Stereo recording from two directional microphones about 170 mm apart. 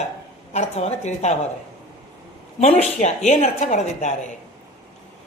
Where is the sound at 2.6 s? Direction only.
40° left (ahead or behind).